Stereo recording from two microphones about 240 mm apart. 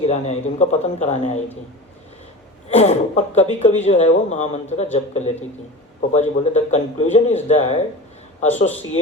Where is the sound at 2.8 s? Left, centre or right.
Left.